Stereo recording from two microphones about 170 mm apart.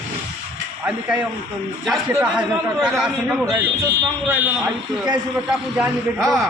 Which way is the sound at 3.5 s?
15° right (ahead or behind).